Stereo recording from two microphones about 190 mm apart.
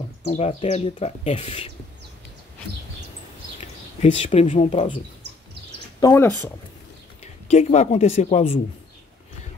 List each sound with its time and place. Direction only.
0.3 s speech: 35° left (ahead or behind)
4.0 s speech: 30° left (ahead or behind)
5.9 s speech: 20° left (ahead or behind)
7.4 s speech: 35° left (ahead or behind)